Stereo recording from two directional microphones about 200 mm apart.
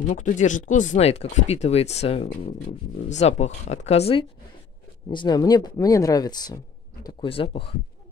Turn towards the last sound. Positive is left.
turn(degrees=30)  # may be behind; listen again after turning